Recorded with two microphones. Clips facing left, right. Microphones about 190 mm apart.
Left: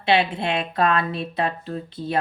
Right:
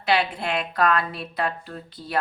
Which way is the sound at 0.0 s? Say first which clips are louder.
Left 3 dB; 25° left (ahead or behind).